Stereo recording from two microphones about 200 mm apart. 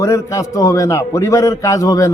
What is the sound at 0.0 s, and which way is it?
A man's voice, 15° left (ahead or behind).